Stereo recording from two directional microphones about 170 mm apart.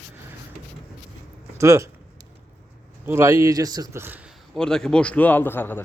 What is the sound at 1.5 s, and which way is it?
Speech, 20° right (ahead or behind).